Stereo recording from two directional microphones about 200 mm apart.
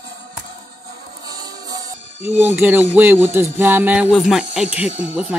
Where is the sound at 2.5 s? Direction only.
10° right (ahead or behind).